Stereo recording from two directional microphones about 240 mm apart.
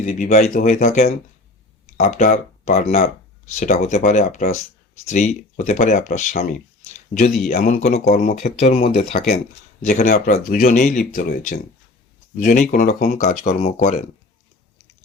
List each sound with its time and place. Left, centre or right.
0.0 s speech: left
9.1 s speech: left
9.8 s speech: left